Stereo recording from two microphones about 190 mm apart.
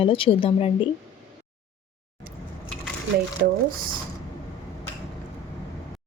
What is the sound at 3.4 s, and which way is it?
Speech, 55° right (ahead or behind).